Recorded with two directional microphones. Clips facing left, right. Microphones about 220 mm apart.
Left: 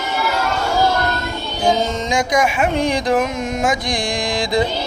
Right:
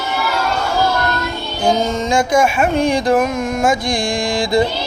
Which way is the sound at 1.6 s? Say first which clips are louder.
Right 2 dB; 15° left (ahead or behind).